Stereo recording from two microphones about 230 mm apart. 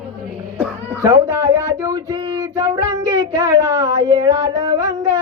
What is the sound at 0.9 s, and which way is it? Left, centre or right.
Music, centre.